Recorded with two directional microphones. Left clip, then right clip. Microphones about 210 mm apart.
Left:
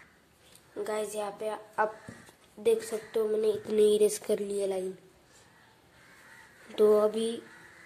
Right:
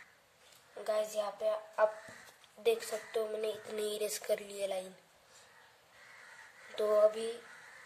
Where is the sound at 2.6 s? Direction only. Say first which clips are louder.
Left 5 dB; 10° left (ahead or behind).